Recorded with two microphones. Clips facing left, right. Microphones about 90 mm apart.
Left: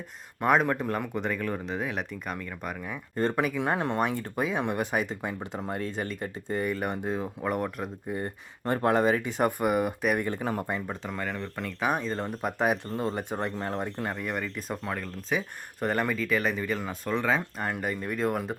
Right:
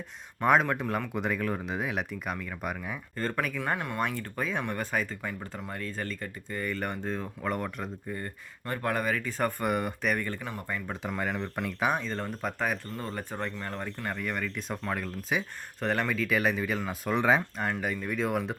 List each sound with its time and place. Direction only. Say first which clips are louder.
0.3 s speech: even; 5° left (ahead or behind)
3.2 s speech: left 5 dB; 15° left (ahead or behind)
3.8 s speech: left 5 dB; 30° left (ahead or behind)
4.2 s speech: left 3 dB; 15° left (ahead or behind)
8.1 s speech: left 4 dB; 25° left (ahead or behind)
11.0 s speech: right 1 dB; 5° right (ahead or behind)
11.9 s speech: left 5 dB; 5° left (ahead or behind)
14.2 s speech: left 1 dB; 5° left (ahead or behind)
16.2 s speech: even; 5° right (ahead or behind)
17.2 s speech: right 2 dB; 15° right (ahead or behind)
17.6 s speech: even; 5° left (ahead or behind)